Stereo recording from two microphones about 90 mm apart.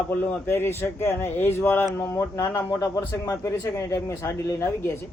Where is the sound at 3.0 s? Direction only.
30° left (ahead or behind).